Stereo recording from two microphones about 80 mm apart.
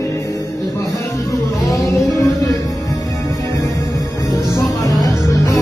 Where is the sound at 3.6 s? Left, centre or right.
Left.